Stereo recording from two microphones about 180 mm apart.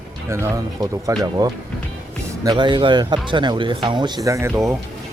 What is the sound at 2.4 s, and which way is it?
Speech, 25° right (ahead or behind).